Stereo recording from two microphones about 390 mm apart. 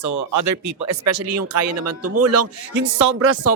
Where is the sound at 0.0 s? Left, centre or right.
Right.